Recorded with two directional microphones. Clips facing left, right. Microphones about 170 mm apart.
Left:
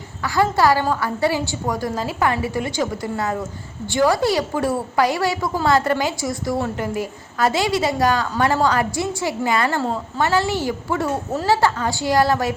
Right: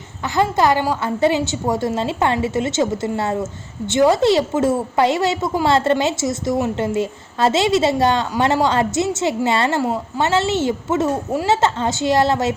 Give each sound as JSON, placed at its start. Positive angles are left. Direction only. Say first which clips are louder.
{"t": 0.3, "sound": "a woman's voice", "louder": "right 1 dB", "side_deg": -20}